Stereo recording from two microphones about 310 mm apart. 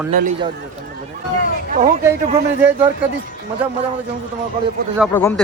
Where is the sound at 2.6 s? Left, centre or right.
Centre.